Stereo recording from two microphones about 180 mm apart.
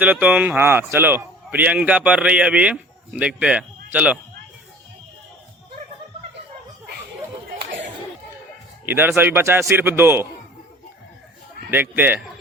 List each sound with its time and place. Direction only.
0.0 s a man's voice: 10° right (ahead or behind)
8.9 s a man's voice: 10° right (ahead or behind)
11.7 s a man's voice: 10° right (ahead or behind)